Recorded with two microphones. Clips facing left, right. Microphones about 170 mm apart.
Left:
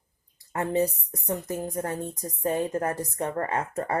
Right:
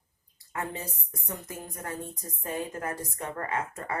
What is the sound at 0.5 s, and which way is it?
Speech, 40° left (ahead or behind).